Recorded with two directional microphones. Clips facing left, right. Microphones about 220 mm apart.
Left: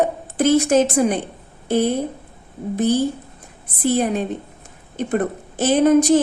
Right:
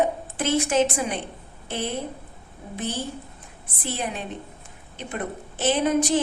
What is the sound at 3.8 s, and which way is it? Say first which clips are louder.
A woman's voice: left 11 dB; 45° left (ahead or behind).